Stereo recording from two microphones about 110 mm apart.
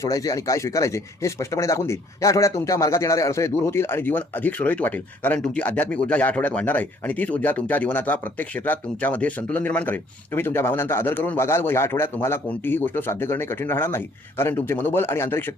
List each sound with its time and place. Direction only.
0.0 s speech: 30° left (ahead or behind)